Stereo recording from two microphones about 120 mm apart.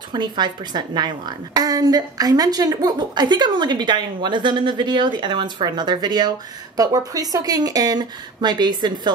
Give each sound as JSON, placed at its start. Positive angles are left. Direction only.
{"t": 0.1, "sound": "a woman's voice", "side_deg": -40}